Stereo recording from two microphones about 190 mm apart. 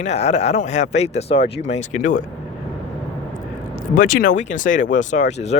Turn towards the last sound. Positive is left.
turn(degrees=35)  # may be behind; listen again after turning